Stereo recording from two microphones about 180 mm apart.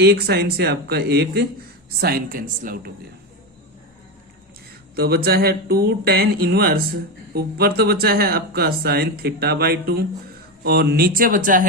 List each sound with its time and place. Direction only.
0.0 s speech: 65° right (ahead or behind)
4.9 s speech: 60° right (ahead or behind)